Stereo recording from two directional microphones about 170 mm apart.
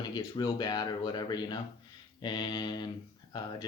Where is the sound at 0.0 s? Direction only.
25° left (ahead or behind).